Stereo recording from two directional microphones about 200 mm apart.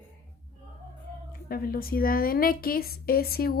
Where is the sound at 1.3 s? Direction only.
50° left (ahead or behind).